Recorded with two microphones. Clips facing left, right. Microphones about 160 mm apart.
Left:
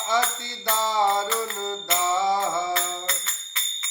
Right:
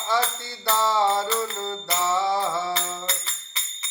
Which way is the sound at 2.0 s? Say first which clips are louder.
Even; 15° left (ahead or behind).